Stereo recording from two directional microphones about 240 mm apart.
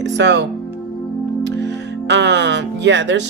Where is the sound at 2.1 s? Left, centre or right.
Right.